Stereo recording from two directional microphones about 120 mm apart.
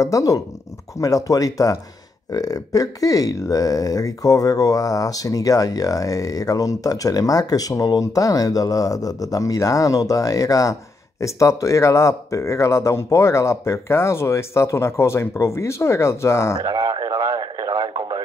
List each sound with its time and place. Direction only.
0.0 s speech: 30° left (ahead or behind)
16.6 s radio: 35° right (ahead or behind)